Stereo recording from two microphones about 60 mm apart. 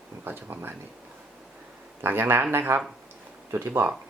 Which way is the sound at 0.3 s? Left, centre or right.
Right.